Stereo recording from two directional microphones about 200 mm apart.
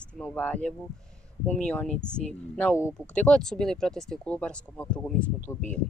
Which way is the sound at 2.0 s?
5° left (ahead or behind).